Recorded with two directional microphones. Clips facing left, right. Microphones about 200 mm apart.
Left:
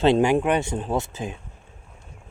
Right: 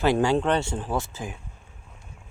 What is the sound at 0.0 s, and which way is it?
Speech, 20° left (ahead or behind).